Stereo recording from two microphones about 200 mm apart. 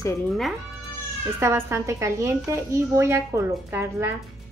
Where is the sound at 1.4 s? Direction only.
15° right (ahead or behind).